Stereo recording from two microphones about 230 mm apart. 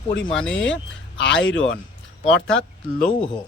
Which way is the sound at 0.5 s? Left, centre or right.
Left.